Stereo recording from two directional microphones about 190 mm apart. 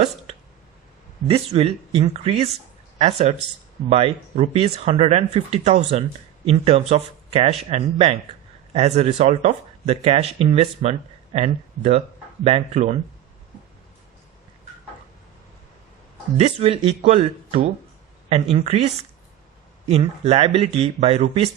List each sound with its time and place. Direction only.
1.3 s speech: 30° right (ahead or behind)
16.4 s speech: 30° right (ahead or behind)
19.9 s speech: 35° right (ahead or behind)